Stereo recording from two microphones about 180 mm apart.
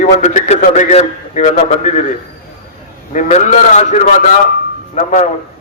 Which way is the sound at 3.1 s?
40° left (ahead or behind).